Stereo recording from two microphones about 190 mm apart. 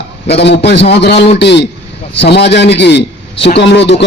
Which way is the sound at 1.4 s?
65° left (ahead or behind).